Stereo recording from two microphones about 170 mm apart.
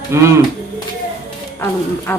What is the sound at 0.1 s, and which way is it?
Speech, 15° right (ahead or behind).